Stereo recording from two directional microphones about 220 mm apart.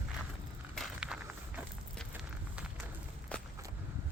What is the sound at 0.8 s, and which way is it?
Walk, 5° right (ahead or behind).